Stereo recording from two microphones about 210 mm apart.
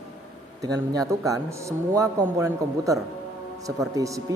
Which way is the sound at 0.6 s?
15° right (ahead or behind).